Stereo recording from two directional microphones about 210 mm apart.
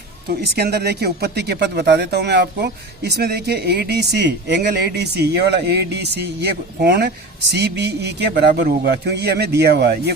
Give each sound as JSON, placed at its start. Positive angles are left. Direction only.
{"t": 0.3, "sound": "speech", "side_deg": -50}